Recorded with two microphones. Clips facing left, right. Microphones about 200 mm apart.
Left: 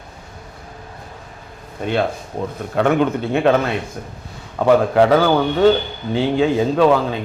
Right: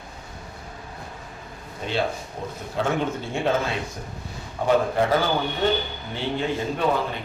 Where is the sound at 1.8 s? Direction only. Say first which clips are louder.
Left 6 dB; 55° left (ahead or behind).